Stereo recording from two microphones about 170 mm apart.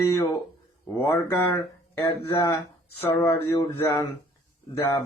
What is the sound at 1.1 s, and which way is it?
Speech, 15° left (ahead or behind).